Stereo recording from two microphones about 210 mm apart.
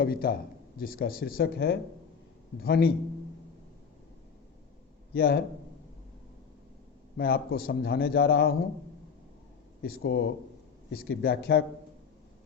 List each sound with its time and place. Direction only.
0.0 s a man's voice: 45° left (ahead or behind)
5.1 s a man's voice: 45° left (ahead or behind)
7.2 s a man's voice: 45° left (ahead or behind)
9.8 s a man's voice: 45° left (ahead or behind)